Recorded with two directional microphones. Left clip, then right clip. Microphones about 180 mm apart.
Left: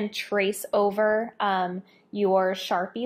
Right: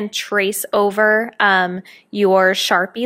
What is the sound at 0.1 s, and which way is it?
Speech, 40° right (ahead or behind).